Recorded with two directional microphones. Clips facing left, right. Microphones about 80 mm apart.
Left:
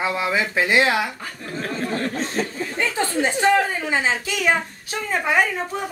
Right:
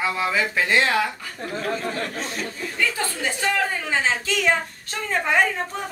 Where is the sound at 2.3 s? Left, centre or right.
Left.